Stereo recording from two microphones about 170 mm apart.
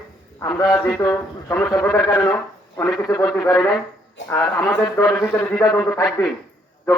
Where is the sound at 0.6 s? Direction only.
20° left (ahead or behind).